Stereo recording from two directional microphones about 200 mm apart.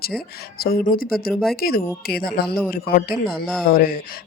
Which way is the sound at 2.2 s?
50° left (ahead or behind).